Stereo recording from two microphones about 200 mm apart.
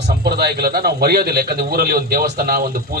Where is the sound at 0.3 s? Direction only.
50° right (ahead or behind).